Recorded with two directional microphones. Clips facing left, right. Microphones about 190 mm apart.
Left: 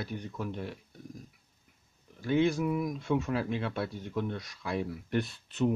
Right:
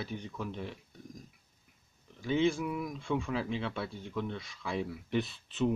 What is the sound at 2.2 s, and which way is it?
Speech, 10° left (ahead or behind).